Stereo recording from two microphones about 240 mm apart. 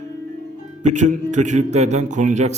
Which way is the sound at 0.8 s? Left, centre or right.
Right.